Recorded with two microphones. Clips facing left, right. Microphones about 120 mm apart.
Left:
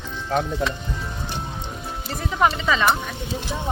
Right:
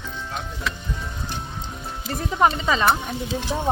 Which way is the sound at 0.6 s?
50° left (ahead or behind).